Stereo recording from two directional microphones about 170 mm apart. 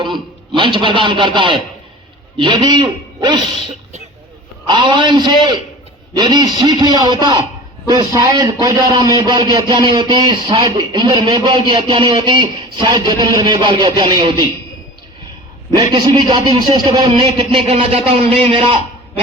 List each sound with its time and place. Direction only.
0.0 s a man's voice: 30° right (ahead or behind)
4.6 s a man's voice: 25° right (ahead or behind)
15.7 s a man's voice: 25° right (ahead or behind)
17.1 s speech: 35° right (ahead or behind)